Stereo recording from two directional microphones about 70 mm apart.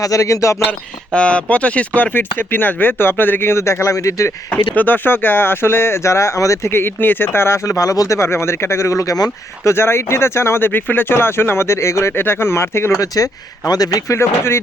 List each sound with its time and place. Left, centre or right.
0.0 s speech: left
1.1 s speech: centre; by 4.5 s left
4.7 s speech: left
6.7 s speech: left
9.6 s speech: left
14.2 s speech: left